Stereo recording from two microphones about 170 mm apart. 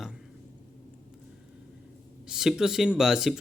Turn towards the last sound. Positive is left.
turn(degrees=0)  # may be behind; listen again after turning